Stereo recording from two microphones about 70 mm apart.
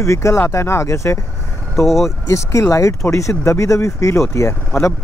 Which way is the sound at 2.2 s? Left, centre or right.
Left.